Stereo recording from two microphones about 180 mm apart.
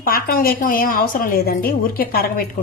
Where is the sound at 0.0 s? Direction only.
55° left (ahead or behind).